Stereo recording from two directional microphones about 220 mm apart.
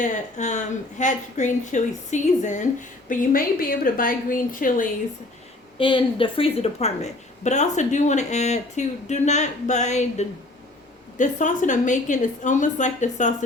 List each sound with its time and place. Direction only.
0.0 s a woman's voice: 35° left (ahead or behind)
5.7 s a woman's voice: 25° left (ahead or behind)